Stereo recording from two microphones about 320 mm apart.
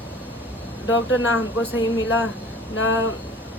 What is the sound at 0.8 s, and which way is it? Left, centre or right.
Speech, left.